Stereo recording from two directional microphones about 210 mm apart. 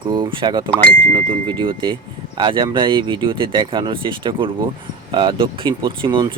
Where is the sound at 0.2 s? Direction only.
25° right (ahead or behind).